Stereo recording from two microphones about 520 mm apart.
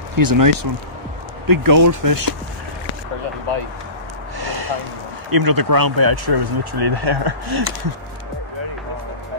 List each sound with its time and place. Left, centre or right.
0.1 s speech: right
4.4 s a sound: right
5.3 s speech: right